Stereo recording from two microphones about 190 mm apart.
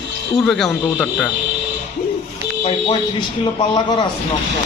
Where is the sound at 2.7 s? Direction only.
25° left (ahead or behind).